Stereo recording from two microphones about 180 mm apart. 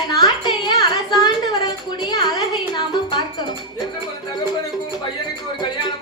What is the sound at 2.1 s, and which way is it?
Music, 20° left (ahead or behind).